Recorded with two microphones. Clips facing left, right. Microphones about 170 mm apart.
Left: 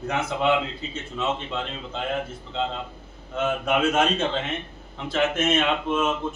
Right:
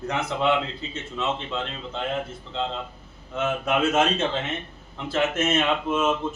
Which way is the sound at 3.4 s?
Centre (ahead or behind).